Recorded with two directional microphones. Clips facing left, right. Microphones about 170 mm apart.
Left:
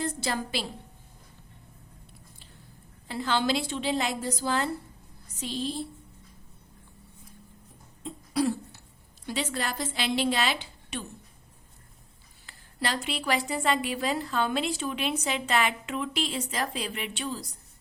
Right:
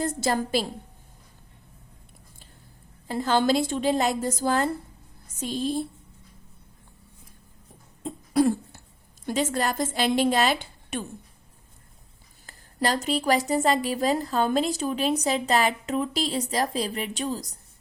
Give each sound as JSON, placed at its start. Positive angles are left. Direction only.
{"t": 0.0, "sound": "a woman's voice", "side_deg": -45}
{"t": 3.1, "sound": "a woman's voice", "side_deg": -45}
{"t": 8.0, "sound": "cough", "side_deg": -50}
{"t": 9.2, "sound": "a woman's voice", "side_deg": -45}
{"t": 12.5, "sound": "a woman's voice", "side_deg": -45}